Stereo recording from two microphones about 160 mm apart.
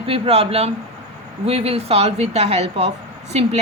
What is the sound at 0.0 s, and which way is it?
A woman's voice, 40° right (ahead or behind).